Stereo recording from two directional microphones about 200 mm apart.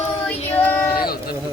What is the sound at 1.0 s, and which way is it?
Speech, 50° left (ahead or behind).